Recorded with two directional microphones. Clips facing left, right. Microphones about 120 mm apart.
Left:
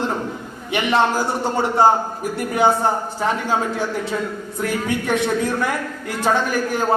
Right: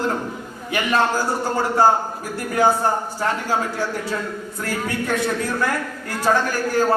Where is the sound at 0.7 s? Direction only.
25° left (ahead or behind).